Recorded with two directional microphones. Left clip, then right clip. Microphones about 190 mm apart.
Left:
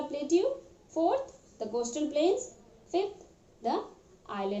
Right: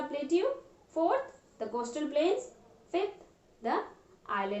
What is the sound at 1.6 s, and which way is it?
Speech, 30° right (ahead or behind).